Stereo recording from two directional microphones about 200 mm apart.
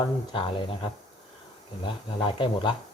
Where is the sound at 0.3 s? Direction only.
25° left (ahead or behind).